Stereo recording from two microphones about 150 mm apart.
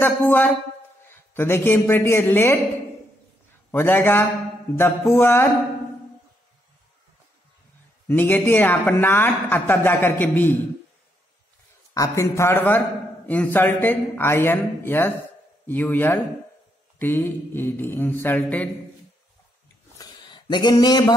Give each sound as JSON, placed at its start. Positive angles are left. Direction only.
{"t": 0.0, "sound": "a woman's voice", "side_deg": 10}
{"t": 3.7, "sound": "a woman's voice", "side_deg": 15}
{"t": 8.1, "sound": "a woman's voice", "side_deg": 15}
{"t": 11.9, "sound": "a woman's voice", "side_deg": 20}
{"t": 20.0, "sound": "a sound", "side_deg": 30}